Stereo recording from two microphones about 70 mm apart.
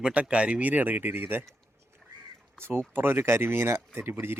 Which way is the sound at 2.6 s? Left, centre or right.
Right.